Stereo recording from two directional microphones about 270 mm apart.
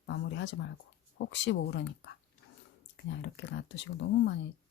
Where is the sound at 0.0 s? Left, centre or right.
Left.